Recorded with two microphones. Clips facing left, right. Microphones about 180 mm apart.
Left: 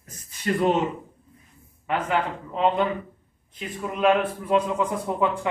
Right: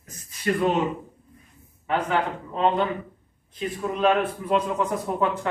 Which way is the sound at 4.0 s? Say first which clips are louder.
Left 1 dB; 10° left (ahead or behind).